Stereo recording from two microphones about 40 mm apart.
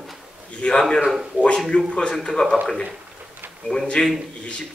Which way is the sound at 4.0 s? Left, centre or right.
Left.